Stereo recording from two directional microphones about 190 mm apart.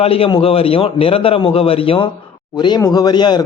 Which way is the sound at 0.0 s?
30° left (ahead or behind).